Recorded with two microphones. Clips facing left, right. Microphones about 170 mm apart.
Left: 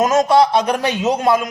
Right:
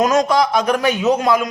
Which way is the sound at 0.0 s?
25° left (ahead or behind).